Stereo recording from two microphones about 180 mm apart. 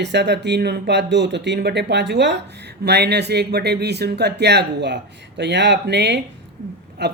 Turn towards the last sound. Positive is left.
turn(degrees=-70)  # may be behind; listen again after turning